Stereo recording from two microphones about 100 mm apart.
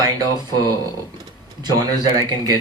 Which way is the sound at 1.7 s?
45° right (ahead or behind).